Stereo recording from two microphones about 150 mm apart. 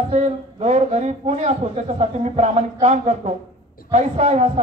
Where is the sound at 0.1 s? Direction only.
45° right (ahead or behind).